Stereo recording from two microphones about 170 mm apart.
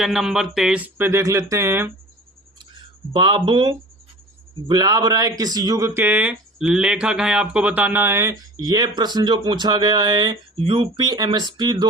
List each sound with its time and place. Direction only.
0.0 s speech: centre (ahead or behind)
3.1 s speech: 25° right (ahead or behind)